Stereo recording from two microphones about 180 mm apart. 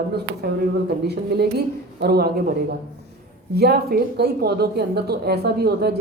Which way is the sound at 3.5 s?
60° right (ahead or behind).